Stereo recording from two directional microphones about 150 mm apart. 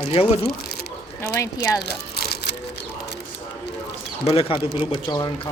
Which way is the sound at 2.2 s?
90° left.